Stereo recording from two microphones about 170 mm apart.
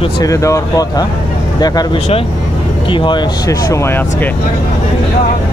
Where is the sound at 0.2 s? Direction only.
20° left (ahead or behind).